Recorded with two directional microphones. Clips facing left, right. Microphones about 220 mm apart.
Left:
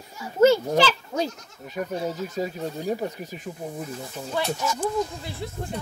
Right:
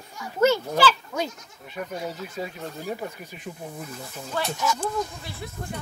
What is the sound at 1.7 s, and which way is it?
Speech, 35° left (ahead or behind).